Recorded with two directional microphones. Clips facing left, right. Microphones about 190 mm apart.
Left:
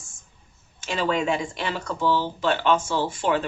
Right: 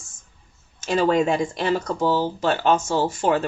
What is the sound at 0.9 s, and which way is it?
Speech, 40° right (ahead or behind).